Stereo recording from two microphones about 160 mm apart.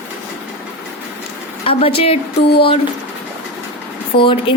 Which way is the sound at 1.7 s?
35° left (ahead or behind).